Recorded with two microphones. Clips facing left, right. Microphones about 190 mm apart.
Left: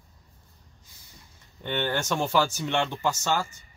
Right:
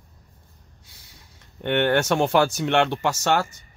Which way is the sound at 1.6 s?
65° right (ahead or behind).